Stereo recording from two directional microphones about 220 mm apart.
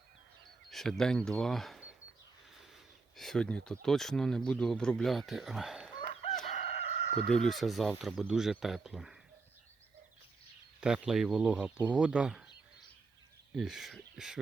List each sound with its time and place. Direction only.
0.7 s speech: centre (ahead or behind)
3.2 s speech: 5° left (ahead or behind)
6.5 s crowing: 30° left (ahead or behind)
7.3 s speech: centre (ahead or behind)
10.8 s speech: 5° right (ahead or behind)
13.6 s speech: centre (ahead or behind)